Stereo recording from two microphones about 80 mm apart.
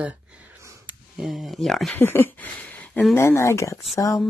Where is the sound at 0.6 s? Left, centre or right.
Right.